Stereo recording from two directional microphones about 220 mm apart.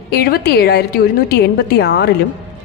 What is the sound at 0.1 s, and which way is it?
A woman's voice, 45° left (ahead or behind).